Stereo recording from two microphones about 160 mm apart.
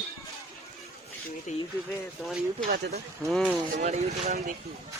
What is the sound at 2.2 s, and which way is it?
Speech, centre (ahead or behind).